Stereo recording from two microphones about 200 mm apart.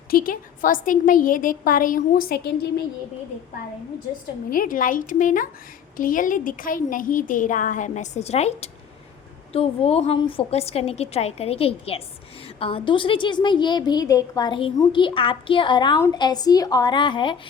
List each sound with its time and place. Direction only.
0.1 s a woman's voice: 45° left (ahead or behind)
4.5 s a woman's voice: 45° left (ahead or behind); by 17.4 s 25° left (ahead or behind)